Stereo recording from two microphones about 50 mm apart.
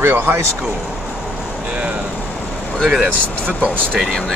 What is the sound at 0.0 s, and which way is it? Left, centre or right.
Speech, right.